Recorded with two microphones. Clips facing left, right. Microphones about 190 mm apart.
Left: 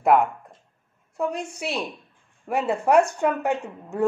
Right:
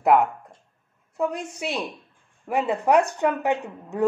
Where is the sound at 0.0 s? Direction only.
Centre (ahead or behind).